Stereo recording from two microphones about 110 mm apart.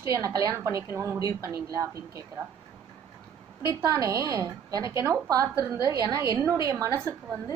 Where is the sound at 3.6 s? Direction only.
30° right (ahead or behind).